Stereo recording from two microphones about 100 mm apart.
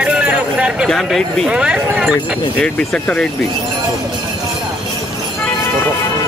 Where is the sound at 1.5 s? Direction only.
10° right (ahead or behind).